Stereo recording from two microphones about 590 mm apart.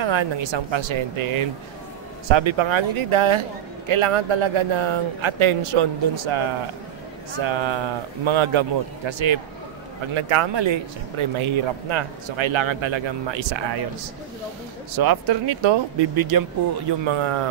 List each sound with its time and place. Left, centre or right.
0.0 s a man's voice: right
15.0 s speech: right
17.0 s a man's voice: right